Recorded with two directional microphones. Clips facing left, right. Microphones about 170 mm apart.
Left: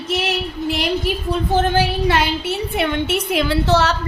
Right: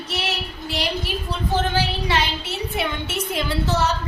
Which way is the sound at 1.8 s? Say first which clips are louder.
Left 5 dB; 55° left (ahead or behind).